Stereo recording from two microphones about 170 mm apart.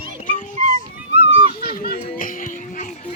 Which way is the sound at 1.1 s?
35° right (ahead or behind).